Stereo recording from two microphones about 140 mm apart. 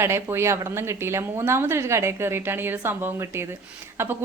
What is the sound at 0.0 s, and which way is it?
A woman's voice, 15° right (ahead or behind).